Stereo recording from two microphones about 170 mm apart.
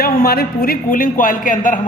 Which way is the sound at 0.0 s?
60° left (ahead or behind).